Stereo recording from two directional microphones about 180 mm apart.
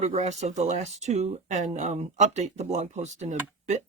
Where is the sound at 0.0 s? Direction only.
40° right (ahead or behind).